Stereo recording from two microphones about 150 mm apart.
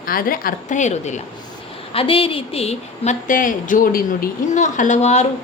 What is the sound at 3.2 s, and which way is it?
A woman's voice, 60° left (ahead or behind).